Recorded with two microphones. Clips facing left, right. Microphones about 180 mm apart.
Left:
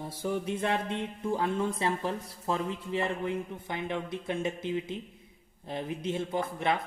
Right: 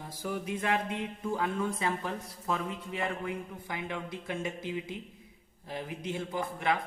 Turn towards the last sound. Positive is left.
turn(degrees=25)  # may be behind; listen again after turning